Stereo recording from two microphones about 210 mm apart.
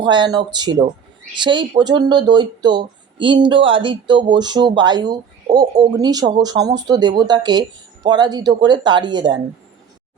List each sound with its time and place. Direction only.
0.0 s speech: 20° right (ahead or behind)